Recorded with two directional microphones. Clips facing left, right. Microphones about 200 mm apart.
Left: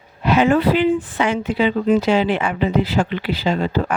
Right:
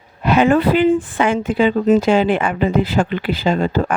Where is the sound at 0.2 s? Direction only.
50° right (ahead or behind).